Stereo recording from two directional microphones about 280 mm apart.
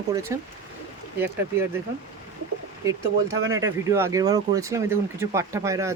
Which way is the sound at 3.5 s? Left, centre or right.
Centre.